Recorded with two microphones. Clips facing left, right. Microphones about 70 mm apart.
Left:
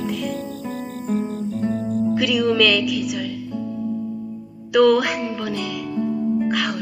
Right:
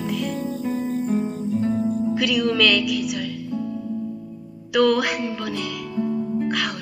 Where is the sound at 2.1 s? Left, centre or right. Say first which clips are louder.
Left 4 dB; centre.